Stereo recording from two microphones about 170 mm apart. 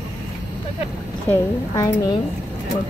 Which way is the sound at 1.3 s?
20° left (ahead or behind).